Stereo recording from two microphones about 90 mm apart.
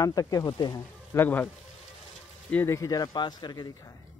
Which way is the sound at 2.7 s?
40° left (ahead or behind).